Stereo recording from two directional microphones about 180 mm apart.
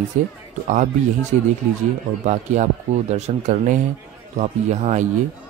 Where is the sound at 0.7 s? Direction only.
45° right (ahead or behind).